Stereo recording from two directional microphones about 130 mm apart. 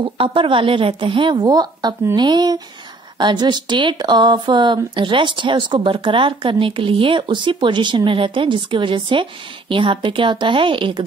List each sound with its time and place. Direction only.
0.2 s speech: 40° right (ahead or behind)